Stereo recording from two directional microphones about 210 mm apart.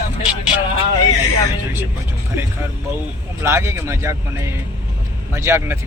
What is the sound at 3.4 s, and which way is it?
Speech, 10° right (ahead or behind).